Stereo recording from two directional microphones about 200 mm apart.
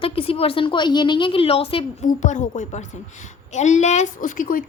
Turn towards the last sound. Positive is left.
turn(degrees=40)  # may be behind; listen again after turning